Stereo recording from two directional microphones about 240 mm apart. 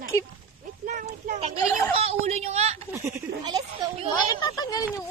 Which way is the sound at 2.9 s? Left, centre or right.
Centre.